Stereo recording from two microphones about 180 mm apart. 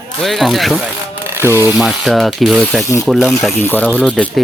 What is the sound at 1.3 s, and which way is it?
Speech, 10° right (ahead or behind).